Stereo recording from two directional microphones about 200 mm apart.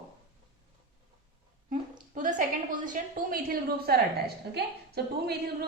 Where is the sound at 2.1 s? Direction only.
40° right (ahead or behind).